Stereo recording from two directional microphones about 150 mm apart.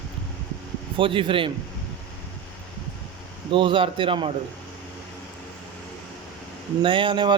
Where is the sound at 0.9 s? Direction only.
35° right (ahead or behind).